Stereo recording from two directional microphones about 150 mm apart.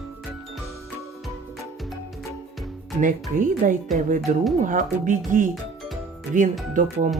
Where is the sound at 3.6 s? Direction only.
55° right (ahead or behind).